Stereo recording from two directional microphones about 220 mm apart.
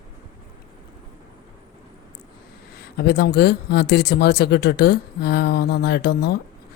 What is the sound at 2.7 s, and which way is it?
Speech, 45° left (ahead or behind).